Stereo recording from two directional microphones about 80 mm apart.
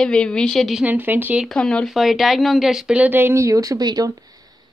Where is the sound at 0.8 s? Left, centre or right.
Right.